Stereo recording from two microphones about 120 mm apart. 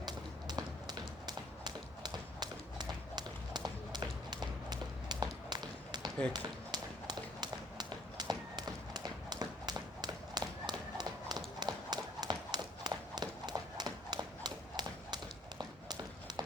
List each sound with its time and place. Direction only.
0.0 s run: 35° right (ahead or behind)